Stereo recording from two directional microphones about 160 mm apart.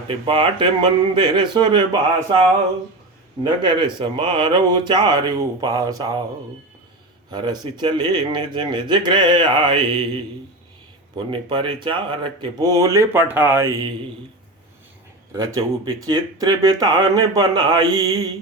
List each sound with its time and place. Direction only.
0.1 s speech: 35° right (ahead or behind)
3.4 s speech: 30° right (ahead or behind)
7.3 s speech: 25° right (ahead or behind)
11.3 s speech: 30° right (ahead or behind); by 13.7 s 15° right (ahead or behind)
15.4 s speech: 20° right (ahead or behind)